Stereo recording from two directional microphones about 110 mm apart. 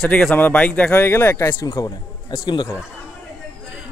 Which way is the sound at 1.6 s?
40° left (ahead or behind).